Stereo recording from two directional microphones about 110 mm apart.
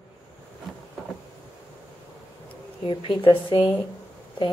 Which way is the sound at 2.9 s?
50° left (ahead or behind).